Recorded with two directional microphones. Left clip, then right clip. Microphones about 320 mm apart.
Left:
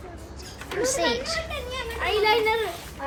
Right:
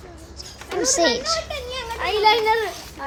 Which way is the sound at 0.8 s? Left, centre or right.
Centre.